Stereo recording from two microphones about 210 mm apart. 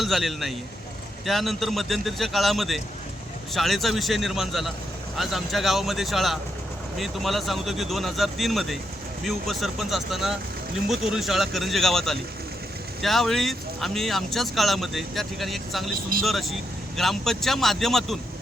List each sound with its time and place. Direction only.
0.0 s speech: centre (ahead or behind)